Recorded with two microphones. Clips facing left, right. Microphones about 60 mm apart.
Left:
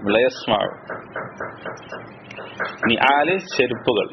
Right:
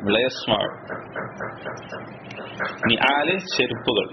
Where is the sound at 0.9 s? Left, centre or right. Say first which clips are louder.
Left 1 dB; left.